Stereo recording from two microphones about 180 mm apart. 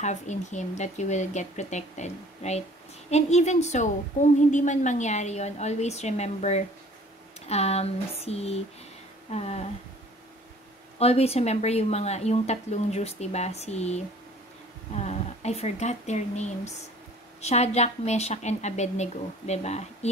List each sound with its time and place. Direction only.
0.0 s a woman's voice: 40° left (ahead or behind)
11.0 s a woman's voice: 35° left (ahead or behind)
15.0 s a woman's voice: 35° left (ahead or behind)